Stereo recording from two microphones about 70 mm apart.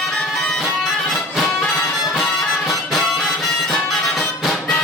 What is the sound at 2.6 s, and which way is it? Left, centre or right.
Music, centre.